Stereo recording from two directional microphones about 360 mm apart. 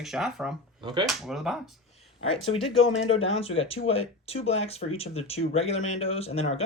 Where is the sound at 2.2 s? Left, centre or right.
Centre.